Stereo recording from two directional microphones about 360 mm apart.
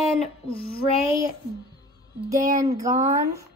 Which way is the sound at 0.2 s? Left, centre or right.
Centre.